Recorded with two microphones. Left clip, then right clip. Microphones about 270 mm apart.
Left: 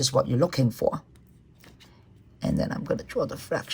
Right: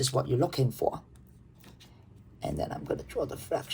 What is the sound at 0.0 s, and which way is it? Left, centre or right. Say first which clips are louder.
Speech: left 5 dB; left.